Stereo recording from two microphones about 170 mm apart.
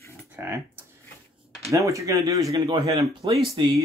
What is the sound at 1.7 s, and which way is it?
Speech, 20° right (ahead or behind).